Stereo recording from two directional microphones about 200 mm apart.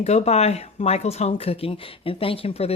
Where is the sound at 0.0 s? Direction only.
30° left (ahead or behind).